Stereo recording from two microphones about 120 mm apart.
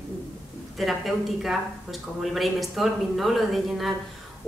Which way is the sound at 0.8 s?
Centre (ahead or behind).